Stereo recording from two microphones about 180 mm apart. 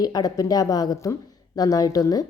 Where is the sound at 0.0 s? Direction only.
20° left (ahead or behind).